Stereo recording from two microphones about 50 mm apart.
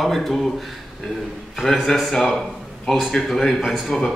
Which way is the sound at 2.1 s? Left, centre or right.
Centre.